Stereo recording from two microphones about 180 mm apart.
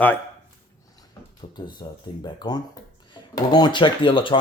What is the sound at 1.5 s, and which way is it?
Speech, 25° left (ahead or behind).